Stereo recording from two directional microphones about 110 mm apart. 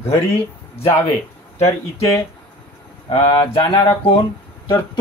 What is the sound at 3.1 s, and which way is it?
Speech, 55° left (ahead or behind).